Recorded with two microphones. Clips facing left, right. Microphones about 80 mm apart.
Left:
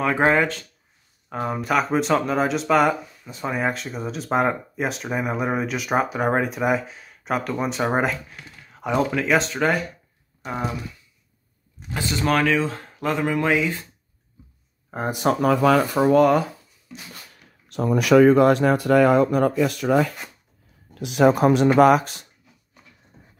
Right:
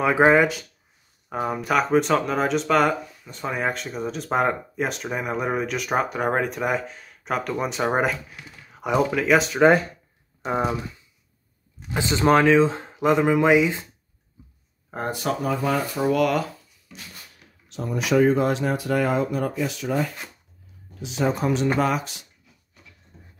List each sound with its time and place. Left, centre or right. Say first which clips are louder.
0.0 s speech: right 2 dB; centre
11.9 s speech: right 3 dB; right
15.4 s speech: left 8 dB; left
16.1 s speech: left 5 dB; left
17.6 s speech: left 6 dB; left
23.1 s a sound: even; left